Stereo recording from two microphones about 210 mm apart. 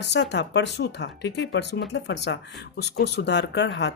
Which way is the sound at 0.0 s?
55° left (ahead or behind).